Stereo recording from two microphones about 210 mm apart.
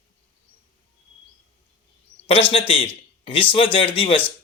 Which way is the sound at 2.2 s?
25° left (ahead or behind).